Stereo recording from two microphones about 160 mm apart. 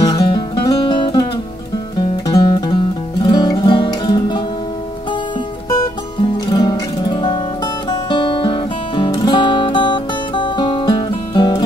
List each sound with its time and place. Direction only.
0.0 s music: 25° left (ahead or behind)
6.4 s music: 25° left (ahead or behind)